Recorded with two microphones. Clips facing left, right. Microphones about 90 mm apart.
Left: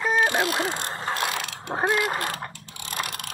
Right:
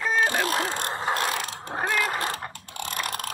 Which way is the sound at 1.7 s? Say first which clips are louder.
Left 3 dB; 25° left (ahead or behind).